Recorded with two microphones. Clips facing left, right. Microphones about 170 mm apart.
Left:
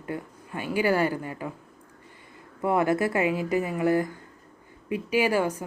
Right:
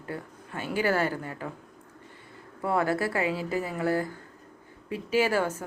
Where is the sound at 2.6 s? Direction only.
15° left (ahead or behind).